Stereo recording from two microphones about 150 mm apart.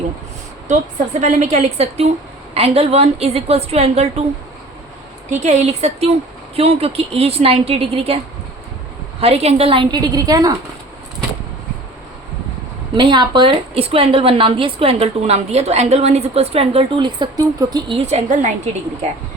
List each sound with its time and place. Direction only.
1.2 s a woman's voice: 50° right (ahead or behind)
5.4 s a woman's voice: 45° right (ahead or behind)
9.2 s speech: 45° right (ahead or behind); by 10.5 s 25° right (ahead or behind)
13.0 s speech: 30° right (ahead or behind); by 18.7 s 50° right (ahead or behind)